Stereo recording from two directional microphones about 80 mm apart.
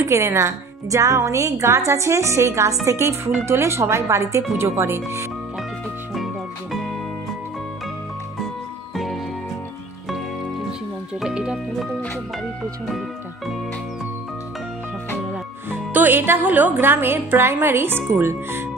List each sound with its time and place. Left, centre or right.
0.0 s a woman's voice: right
6.1 s music: centre
8.9 s music: centre
11.1 s speech: centre
15.7 s a woman's voice: right